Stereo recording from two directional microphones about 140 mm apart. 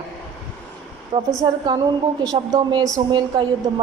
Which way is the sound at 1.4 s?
30° right (ahead or behind).